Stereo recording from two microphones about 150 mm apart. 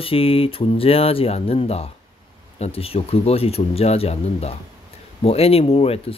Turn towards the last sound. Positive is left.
turn(degrees=40)  # may be behind; listen again after turning